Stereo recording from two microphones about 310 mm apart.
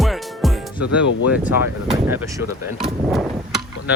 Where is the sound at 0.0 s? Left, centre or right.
Centre.